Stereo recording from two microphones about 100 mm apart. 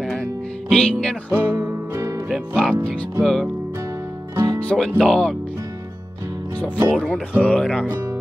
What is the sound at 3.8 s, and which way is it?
Music, 30° right (ahead or behind).